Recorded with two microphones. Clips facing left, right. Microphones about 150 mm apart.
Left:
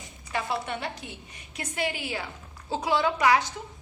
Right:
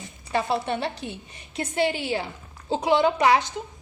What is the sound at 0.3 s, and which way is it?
A woman's voice, 30° right (ahead or behind).